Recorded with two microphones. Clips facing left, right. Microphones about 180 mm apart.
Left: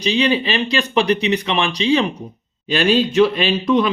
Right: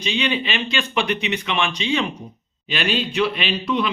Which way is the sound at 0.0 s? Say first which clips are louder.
Left 6 dB; 35° left (ahead or behind).